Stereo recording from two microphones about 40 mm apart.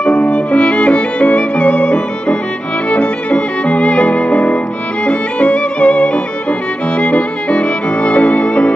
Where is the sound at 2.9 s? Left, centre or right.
Left.